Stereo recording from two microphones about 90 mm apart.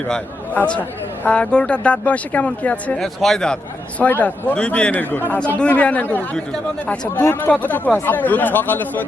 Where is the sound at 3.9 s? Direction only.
20° left (ahead or behind).